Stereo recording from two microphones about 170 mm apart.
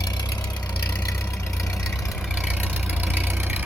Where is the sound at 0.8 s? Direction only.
15° left (ahead or behind).